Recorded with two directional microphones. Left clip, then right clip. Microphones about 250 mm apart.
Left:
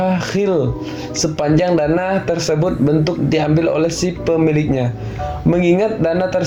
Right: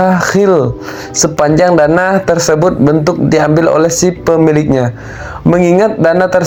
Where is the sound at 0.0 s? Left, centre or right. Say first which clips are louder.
Right 8 dB; centre.